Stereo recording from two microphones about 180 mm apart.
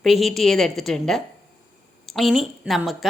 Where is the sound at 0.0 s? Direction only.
Centre (ahead or behind).